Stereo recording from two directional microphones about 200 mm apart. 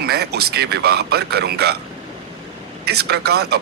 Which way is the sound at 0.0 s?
55° right (ahead or behind).